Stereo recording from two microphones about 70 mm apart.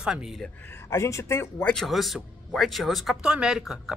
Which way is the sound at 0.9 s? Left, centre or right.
Left.